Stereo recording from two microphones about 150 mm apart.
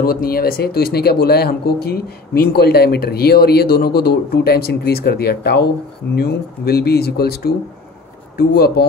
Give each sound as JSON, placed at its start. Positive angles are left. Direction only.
{"t": 0.0, "sound": "speech", "side_deg": 80}